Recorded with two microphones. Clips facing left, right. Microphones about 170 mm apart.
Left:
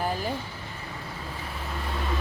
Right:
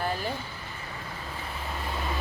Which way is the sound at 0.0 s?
10° left (ahead or behind).